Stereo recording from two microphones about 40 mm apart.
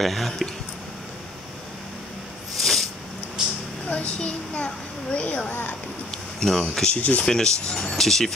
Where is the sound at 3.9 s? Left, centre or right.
Left.